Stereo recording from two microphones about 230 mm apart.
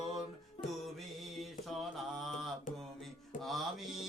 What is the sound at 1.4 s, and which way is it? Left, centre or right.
Mantra, centre.